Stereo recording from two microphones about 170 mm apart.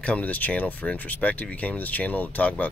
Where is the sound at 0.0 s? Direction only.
10° left (ahead or behind).